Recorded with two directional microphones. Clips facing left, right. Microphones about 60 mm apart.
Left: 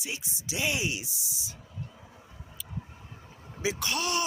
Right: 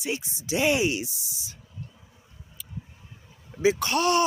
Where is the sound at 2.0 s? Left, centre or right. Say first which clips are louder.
Left 4 dB; left.